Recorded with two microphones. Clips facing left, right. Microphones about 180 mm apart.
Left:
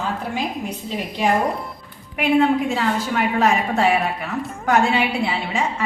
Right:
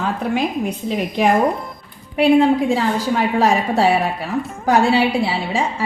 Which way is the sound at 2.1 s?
35° right (ahead or behind).